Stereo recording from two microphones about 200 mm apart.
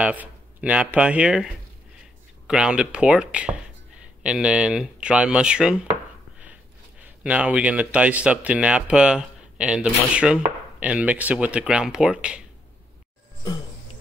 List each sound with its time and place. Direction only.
0.0 s speech: 5° right (ahead or behind)